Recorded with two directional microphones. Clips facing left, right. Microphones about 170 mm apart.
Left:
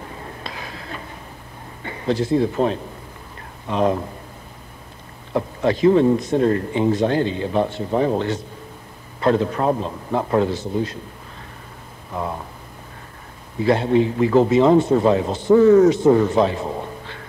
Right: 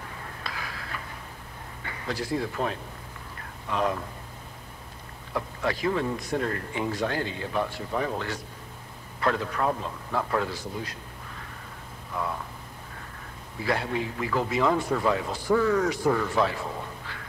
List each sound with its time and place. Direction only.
0.2 s a sound: 25° left (ahead or behind)
1.8 s a man's voice: 25° left (ahead or behind)
5.3 s a man's voice: 25° left (ahead or behind)
12.1 s speech: 30° left (ahead or behind)
13.6 s a man's voice: 25° left (ahead or behind)